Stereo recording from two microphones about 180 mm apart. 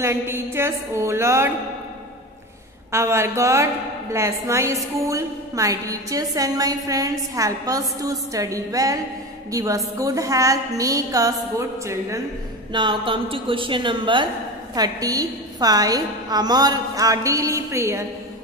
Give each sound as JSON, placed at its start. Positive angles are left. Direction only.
{"t": 0.0, "sound": "a woman's voice", "side_deg": -15}
{"t": 2.9, "sound": "a woman's voice", "side_deg": -15}
{"t": 12.7, "sound": "a woman's voice", "side_deg": -25}